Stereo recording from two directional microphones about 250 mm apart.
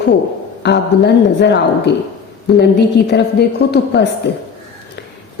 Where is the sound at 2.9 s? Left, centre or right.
Left.